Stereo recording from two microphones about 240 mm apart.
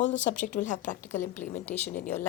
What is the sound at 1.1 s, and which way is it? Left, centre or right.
A woman's voice, centre.